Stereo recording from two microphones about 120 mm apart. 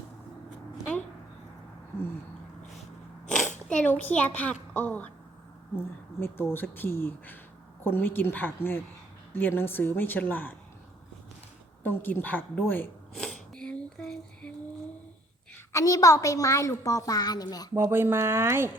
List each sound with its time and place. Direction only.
3.2 s a sound: 5° left (ahead or behind)
3.7 s speech: 10° left (ahead or behind)
11.8 s speech: 15° left (ahead or behind)
13.1 s hiccup: 5° left (ahead or behind)
15.7 s a woman's voice: 30° left (ahead or behind)
17.7 s speech: 20° right (ahead or behind)